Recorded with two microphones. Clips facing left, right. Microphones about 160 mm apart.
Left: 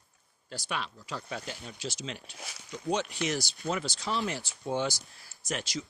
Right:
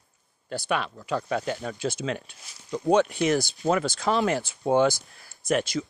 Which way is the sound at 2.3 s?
75° left (ahead or behind).